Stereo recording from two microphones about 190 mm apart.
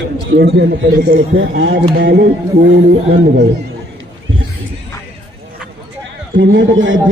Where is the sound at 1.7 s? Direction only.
55° right (ahead or behind).